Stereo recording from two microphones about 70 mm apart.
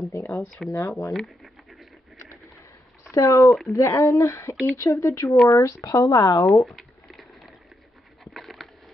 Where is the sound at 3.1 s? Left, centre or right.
Left.